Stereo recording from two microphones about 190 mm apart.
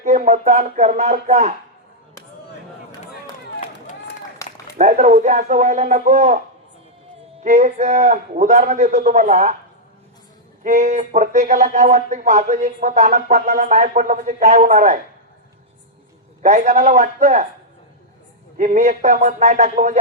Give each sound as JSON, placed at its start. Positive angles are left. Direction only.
{"t": 0.0, "sound": "speech", "side_deg": -40}
{"t": 4.4, "sound": "a sound", "side_deg": 15}
{"t": 4.8, "sound": "speech", "side_deg": -40}
{"t": 7.4, "sound": "speech", "side_deg": -40}
{"t": 10.6, "sound": "speech", "side_deg": -40}
{"t": 16.4, "sound": "speech", "side_deg": -40}
{"t": 18.5, "sound": "speech", "side_deg": -40}